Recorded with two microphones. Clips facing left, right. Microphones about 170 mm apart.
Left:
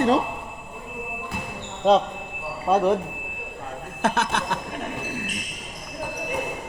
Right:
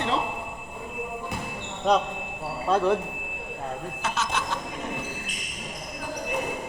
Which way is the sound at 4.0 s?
55° left (ahead or behind).